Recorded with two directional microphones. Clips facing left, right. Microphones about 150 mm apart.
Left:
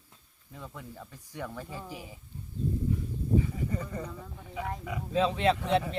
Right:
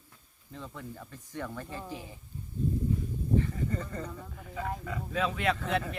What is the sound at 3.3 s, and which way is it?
Speech, 10° left (ahead or behind).